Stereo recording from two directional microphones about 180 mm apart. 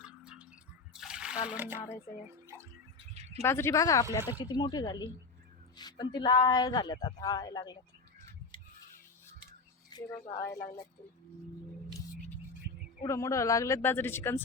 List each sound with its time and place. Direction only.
0.0 s water: 5° right (ahead or behind)
2.5 s drip: 15° right (ahead or behind)
3.4 s a man's voice: 15° left (ahead or behind)
8.5 s a sound: 25° left (ahead or behind)
10.2 s speech: 15° left (ahead or behind)
13.0 s speech: 15° left (ahead or behind)